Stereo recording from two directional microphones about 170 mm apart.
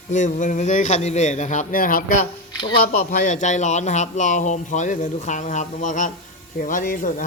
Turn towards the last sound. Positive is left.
turn(degrees=50)  # may be behind; listen again after turning